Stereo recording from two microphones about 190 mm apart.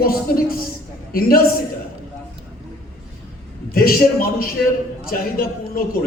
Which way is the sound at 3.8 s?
50° left (ahead or behind).